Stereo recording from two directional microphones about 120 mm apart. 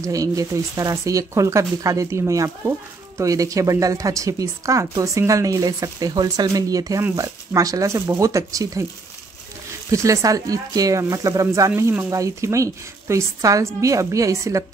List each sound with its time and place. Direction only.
0.0 s speech: 30° right (ahead or behind)
9.8 s speech: 25° right (ahead or behind)